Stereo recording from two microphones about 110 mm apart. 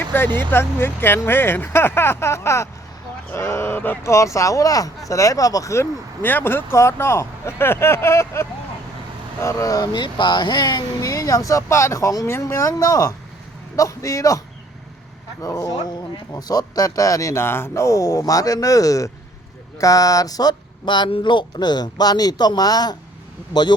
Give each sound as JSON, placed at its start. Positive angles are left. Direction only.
{"t": 0.0, "sound": "vehicle", "side_deg": 20}
{"t": 0.3, "sound": "speech", "side_deg": 20}